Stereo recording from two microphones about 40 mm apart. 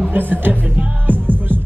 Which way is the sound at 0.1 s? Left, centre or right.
Right.